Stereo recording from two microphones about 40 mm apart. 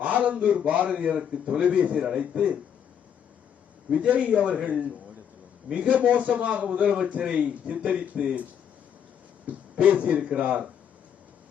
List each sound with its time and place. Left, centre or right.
0.0 s a man's voice: right
3.9 s a man's voice: right
4.5 s a man's voice: right
5.9 s a man's voice: right
9.7 s a man's voice: right